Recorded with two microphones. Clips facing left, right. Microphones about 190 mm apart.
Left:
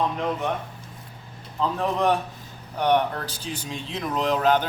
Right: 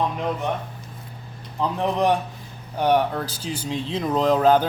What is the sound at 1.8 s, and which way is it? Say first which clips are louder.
Speech: right 2 dB; 20° right (ahead or behind).